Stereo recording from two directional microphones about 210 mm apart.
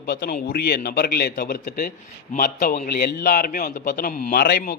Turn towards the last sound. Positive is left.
turn(degrees=50)  # may be behind; listen again after turning